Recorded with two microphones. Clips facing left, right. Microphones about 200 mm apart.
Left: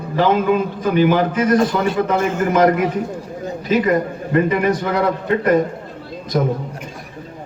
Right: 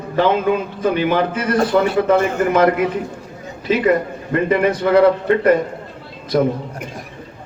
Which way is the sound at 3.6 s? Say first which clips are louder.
Right 1 dB; 45° left (ahead or behind).